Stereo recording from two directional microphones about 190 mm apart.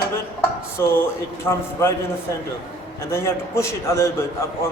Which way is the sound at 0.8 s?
15° left (ahead or behind).